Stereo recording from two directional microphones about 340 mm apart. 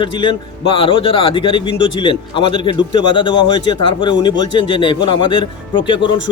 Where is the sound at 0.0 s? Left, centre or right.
Centre.